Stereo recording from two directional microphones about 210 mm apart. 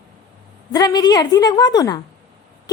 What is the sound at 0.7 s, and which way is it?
A woman's voice, 20° left (ahead or behind).